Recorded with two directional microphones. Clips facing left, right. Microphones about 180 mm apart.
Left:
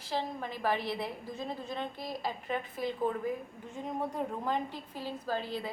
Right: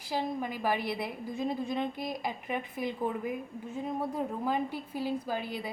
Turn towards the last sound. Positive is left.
turn(degrees=-10)  # may be behind; listen again after turning